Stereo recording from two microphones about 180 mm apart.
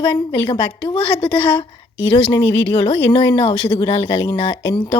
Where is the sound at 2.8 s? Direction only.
25° left (ahead or behind).